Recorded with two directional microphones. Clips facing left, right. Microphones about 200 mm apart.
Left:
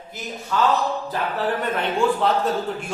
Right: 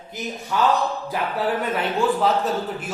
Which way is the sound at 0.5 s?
15° right (ahead or behind).